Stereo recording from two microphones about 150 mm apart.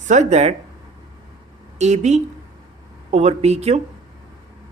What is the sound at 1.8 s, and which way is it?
Speech, 50° right (ahead or behind).